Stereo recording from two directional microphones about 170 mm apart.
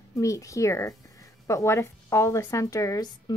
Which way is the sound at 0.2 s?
20° left (ahead or behind).